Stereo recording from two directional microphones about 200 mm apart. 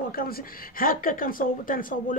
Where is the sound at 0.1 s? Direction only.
45° left (ahead or behind).